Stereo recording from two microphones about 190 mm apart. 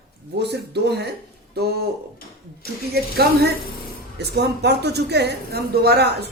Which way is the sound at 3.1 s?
55° right (ahead or behind).